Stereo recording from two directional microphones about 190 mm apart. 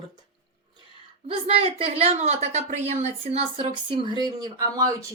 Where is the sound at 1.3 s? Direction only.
30° right (ahead or behind).